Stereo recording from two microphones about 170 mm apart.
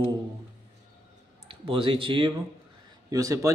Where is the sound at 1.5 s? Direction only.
30° right (ahead or behind).